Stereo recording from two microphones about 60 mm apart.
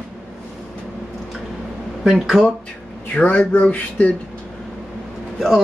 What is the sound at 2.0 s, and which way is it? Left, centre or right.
Speech, centre.